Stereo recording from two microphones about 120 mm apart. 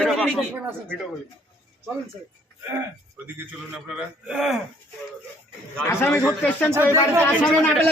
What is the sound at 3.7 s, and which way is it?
Speech, 5° right (ahead or behind).